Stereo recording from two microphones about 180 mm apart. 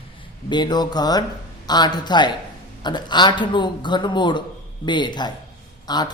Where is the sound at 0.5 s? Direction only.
25° left (ahead or behind).